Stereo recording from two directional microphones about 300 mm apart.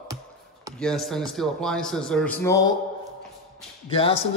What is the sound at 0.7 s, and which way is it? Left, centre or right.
Speech, centre.